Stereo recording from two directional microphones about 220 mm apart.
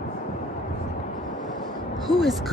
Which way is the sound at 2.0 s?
Centre (ahead or behind).